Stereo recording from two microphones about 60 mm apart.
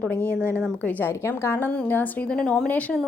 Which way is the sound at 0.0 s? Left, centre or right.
Left.